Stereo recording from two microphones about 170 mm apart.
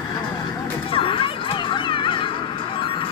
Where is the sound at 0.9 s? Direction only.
30° left (ahead or behind).